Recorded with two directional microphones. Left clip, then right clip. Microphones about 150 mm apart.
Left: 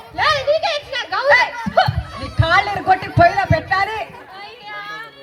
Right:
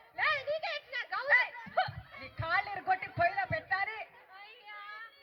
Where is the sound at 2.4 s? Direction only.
15° right (ahead or behind).